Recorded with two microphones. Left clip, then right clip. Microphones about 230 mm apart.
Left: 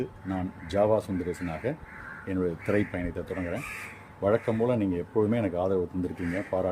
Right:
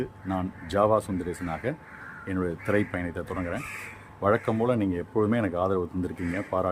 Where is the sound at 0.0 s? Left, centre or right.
Centre.